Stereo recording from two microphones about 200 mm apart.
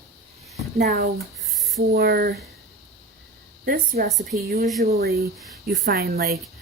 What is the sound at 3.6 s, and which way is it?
A woman's voice, 45° right (ahead or behind).